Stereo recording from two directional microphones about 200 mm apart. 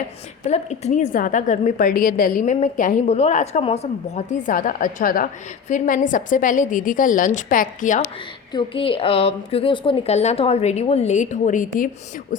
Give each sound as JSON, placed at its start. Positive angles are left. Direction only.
{"t": 0.4, "sound": "a woman's voice", "side_deg": 35}
{"t": 8.5, "sound": "a woman's voice", "side_deg": 25}